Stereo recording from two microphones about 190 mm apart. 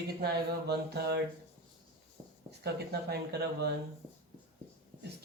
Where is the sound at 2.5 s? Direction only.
60° right (ahead or behind).